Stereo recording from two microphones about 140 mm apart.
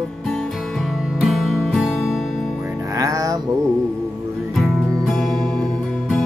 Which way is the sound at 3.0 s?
25° right (ahead or behind).